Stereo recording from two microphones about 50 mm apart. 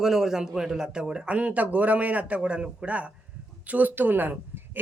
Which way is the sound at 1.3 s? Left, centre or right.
Right.